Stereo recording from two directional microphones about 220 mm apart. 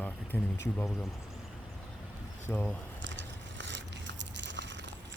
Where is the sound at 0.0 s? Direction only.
10° left (ahead or behind).